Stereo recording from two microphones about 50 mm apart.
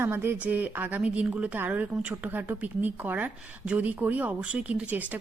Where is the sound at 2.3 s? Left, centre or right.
Right.